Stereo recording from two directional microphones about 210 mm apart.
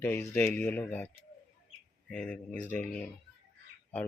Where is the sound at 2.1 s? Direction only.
5° left (ahead or behind).